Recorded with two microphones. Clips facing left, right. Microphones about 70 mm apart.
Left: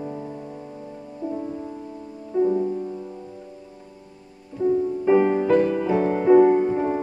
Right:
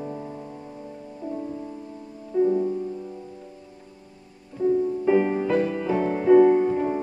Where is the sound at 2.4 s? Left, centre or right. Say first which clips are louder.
Even; centre.